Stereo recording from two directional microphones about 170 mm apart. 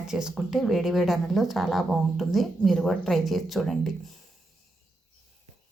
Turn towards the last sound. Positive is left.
turn(degrees=0)  # may be behind; listen again after turning